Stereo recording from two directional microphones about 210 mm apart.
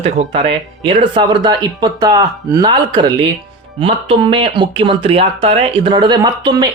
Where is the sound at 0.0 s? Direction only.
30° right (ahead or behind).